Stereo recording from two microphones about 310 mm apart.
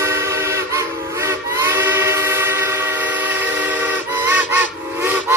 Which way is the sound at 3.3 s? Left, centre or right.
Centre.